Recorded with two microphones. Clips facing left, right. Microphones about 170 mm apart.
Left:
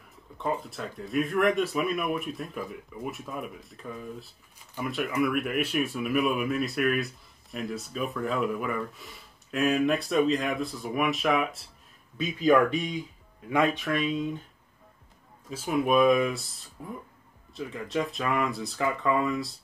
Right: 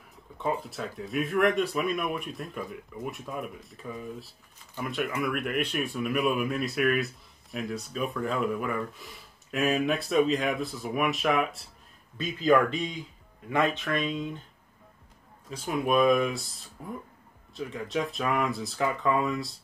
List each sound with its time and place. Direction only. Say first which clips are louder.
0.4 s speech: even; centre (ahead or behind)
15.5 s speech: left 2 dB; 5° left (ahead or behind)